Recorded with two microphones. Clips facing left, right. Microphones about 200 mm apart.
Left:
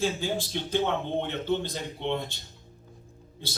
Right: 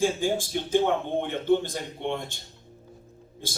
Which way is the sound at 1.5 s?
50° right (ahead or behind).